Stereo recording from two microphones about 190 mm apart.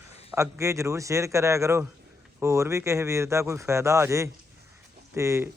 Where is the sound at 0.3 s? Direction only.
15° right (ahead or behind).